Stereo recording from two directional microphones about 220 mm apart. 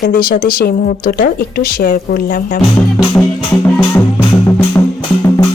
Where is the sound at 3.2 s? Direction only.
5° left (ahead or behind).